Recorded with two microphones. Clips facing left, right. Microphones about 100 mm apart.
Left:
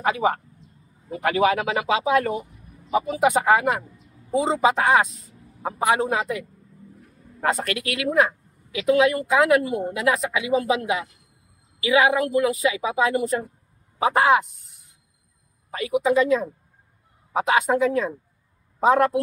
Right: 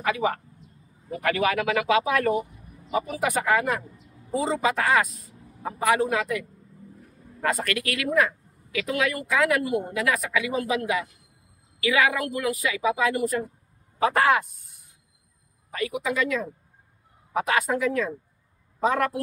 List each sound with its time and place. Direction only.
0.0 s speech: 30° left (ahead or behind)
15.7 s speech: 25° left (ahead or behind)